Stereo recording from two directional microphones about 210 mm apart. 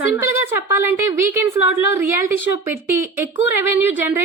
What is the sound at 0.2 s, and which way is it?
Speech, 10° right (ahead or behind).